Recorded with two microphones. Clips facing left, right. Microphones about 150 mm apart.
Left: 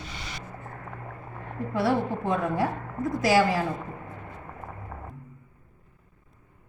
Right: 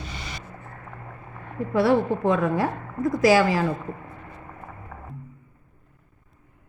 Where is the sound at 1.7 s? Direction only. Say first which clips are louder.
Right 5 dB; 90° right.